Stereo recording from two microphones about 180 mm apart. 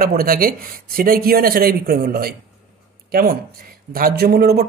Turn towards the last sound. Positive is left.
turn(degrees=-60)  # may be behind; listen again after turning